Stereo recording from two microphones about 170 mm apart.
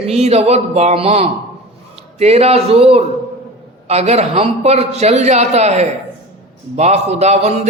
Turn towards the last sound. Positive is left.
turn(degrees=-40)  # may be behind; listen again after turning